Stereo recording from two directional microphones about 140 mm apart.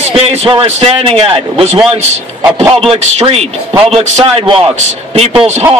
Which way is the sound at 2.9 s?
45° right (ahead or behind).